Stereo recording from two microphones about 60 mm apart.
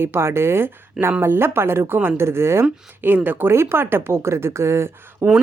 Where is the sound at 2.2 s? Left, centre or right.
Right.